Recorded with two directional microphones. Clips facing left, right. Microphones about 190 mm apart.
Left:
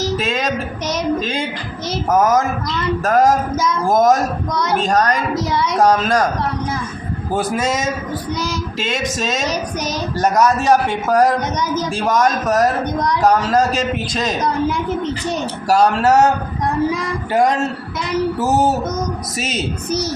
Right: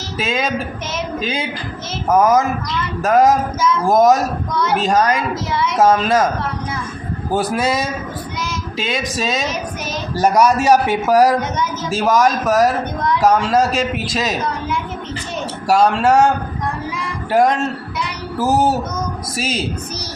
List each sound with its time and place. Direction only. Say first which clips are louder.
0.2 s a man's voice: even; centre (ahead or behind)
5.3 s a woman's voice: left 2 dB; 40° left (ahead or behind)
5.7 s a man's voice: right 1 dB; centre (ahead or behind)
7.3 s a man's voice: right 1 dB; centre (ahead or behind)
15.7 s a man's voice: even; centre (ahead or behind)
17.3 s a man's voice: right 1 dB; centre (ahead or behind)
18.3 s a sound: right 5 dB; 25° left (ahead or behind)
19.4 s a man's voice: right 2 dB; centre (ahead or behind)